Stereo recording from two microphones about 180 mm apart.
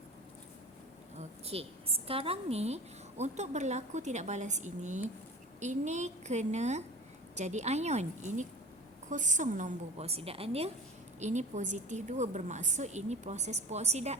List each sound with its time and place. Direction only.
1.5 s a woman's voice: 35° right (ahead or behind)